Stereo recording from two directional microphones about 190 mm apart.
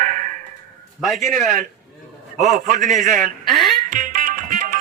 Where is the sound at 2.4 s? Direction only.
40° right (ahead or behind).